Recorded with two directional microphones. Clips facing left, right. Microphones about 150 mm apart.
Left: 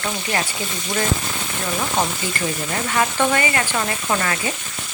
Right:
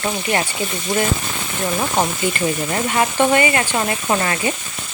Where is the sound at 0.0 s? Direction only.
25° right (ahead or behind).